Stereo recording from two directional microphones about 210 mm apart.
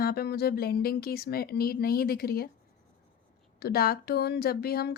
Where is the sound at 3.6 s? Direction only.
45° left (ahead or behind).